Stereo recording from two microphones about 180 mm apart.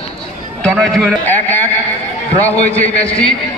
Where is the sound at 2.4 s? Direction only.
10° left (ahead or behind).